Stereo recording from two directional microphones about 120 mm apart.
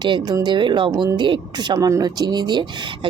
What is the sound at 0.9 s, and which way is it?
Speech, 30° right (ahead or behind).